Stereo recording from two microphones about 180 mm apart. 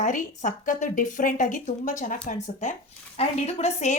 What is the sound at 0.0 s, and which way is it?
A woman's voice, 45° left (ahead or behind).